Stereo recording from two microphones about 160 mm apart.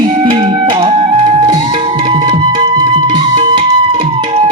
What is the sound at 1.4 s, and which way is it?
Music, 30° right (ahead or behind).